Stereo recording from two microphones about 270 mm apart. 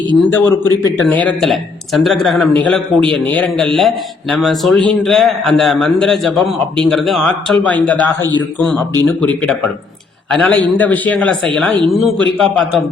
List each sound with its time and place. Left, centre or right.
0.3 s a man's voice: centre